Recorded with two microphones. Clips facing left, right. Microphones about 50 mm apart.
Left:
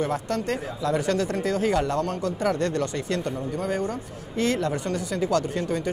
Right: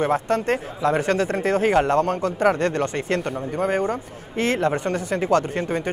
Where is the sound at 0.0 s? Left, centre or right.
Right.